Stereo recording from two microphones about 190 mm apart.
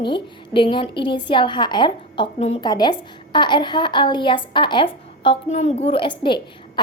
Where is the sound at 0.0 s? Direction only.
25° left (ahead or behind).